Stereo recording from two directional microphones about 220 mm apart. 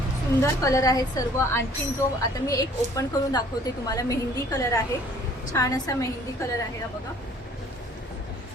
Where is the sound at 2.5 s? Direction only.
15° left (ahead or behind).